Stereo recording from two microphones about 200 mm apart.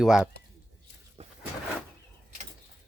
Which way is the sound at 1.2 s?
30° right (ahead or behind).